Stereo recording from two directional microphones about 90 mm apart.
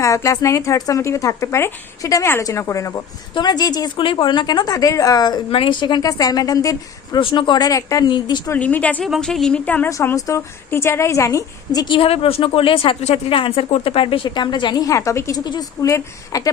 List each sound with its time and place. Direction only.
0.0 s a woman's voice: 35° left (ahead or behind)
3.3 s a woman's voice: 50° left (ahead or behind)
3.9 s a woman's voice: 70° left (ahead or behind); by 5.4 s 50° left (ahead or behind)
5.5 s a woman's voice: 80° left; by 7.2 s 40° left (ahead or behind)
7.2 s speech: 70° left (ahead or behind)
7.7 s a woman's voice: 40° left (ahead or behind)
8.0 s speech: 60° left (ahead or behind)
8.5 s speech: 15° left (ahead or behind)
9.2 s a woman's voice: 5° left (ahead or behind)
9.6 s a woman's voice: 15° left (ahead or behind)
10.2 s a woman's voice: 40° left (ahead or behind)
11.9 s speech: 85° left
14.3 s a woman's voice: 55° left (ahead or behind); by 16.5 s 35° left (ahead or behind)